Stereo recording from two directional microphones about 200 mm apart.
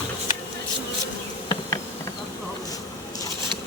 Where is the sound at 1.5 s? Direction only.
15° left (ahead or behind).